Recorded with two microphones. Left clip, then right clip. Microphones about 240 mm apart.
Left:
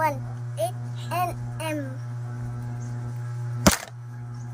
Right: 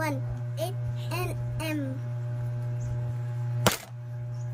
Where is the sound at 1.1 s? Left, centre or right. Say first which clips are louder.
Left 8 dB; centre.